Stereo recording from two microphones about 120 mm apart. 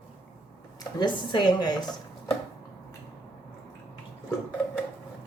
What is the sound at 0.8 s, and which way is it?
Speech, 40° left (ahead or behind).